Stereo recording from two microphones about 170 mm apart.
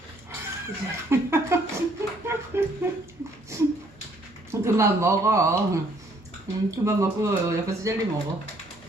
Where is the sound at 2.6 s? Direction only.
15° right (ahead or behind).